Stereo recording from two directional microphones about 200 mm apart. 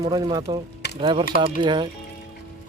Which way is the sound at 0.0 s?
20° right (ahead or behind).